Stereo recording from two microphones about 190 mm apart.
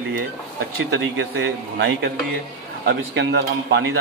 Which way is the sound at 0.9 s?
70° right (ahead or behind).